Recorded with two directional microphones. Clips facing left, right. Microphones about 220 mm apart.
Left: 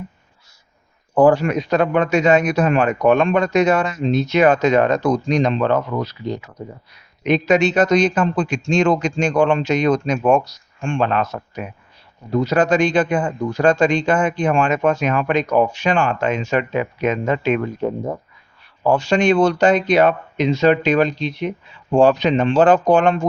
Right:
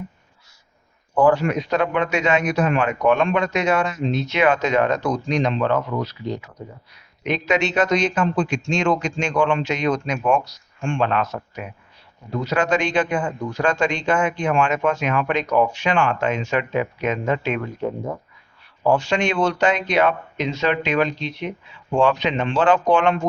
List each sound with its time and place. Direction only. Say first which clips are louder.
1.1 s speech: left 3 dB; 35° left (ahead or behind)
7.3 s speech: left 6 dB; 40° left (ahead or behind)
18.9 s speech: left 4 dB; 35° left (ahead or behind)